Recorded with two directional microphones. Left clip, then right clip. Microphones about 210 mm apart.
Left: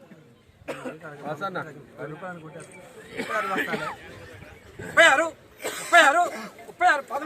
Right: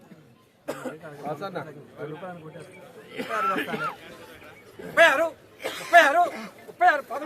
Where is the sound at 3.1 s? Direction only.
20° left (ahead or behind).